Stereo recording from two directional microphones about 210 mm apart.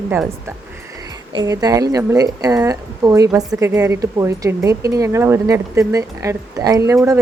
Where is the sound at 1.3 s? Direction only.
20° right (ahead or behind).